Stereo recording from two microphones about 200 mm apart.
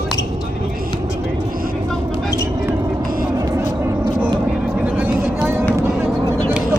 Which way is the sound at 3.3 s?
15° right (ahead or behind).